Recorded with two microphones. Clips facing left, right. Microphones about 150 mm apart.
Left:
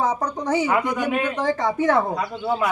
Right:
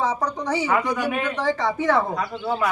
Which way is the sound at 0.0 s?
50° left (ahead or behind).